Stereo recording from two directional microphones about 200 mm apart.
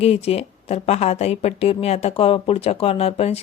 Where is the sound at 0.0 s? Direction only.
30° left (ahead or behind).